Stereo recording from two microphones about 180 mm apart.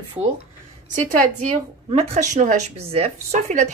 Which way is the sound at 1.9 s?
40° right (ahead or behind).